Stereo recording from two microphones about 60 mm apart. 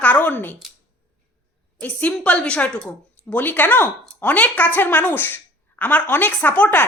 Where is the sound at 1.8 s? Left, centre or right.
Left.